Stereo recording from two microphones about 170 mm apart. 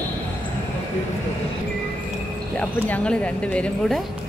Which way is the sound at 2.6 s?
10° left (ahead or behind).